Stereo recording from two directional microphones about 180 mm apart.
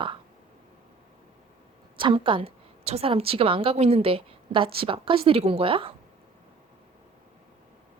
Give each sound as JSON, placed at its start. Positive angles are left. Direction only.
{"t": 2.0, "sound": "a woman's voice", "side_deg": -30}